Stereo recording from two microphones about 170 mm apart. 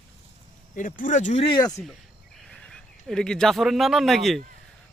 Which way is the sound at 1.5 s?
20° left (ahead or behind).